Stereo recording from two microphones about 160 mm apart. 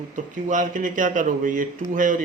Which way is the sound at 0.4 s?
50° right (ahead or behind).